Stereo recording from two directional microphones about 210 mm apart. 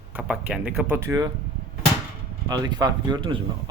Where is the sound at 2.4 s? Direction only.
20° right (ahead or behind).